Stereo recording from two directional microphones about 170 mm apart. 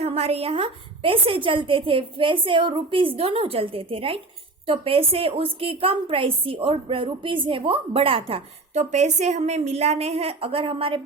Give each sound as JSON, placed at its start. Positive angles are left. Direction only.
{"t": 0.0, "sound": "a woman's voice", "side_deg": -35}